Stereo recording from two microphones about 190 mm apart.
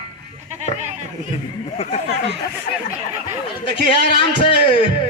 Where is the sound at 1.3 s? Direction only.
35° left (ahead or behind).